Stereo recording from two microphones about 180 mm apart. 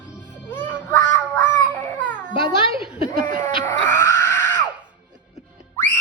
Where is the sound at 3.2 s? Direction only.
45° right (ahead or behind).